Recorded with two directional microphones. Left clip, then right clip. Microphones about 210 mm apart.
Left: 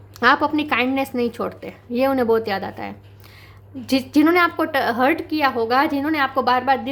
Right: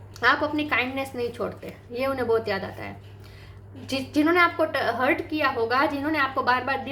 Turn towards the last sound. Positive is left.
turn(degrees=40)  # may be behind; listen again after turning